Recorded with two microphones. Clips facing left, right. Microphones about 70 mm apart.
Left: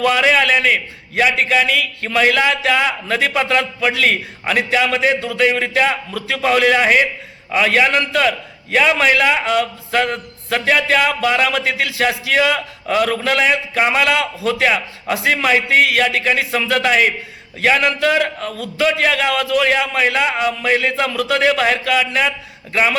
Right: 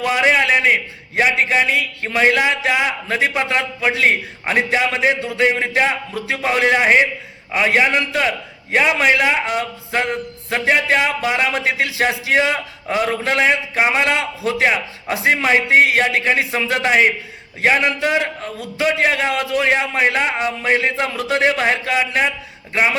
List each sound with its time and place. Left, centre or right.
0.1 s a man's voice: right